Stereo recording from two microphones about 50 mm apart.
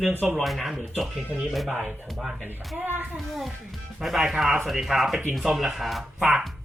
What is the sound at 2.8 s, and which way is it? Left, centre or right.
Speech, right.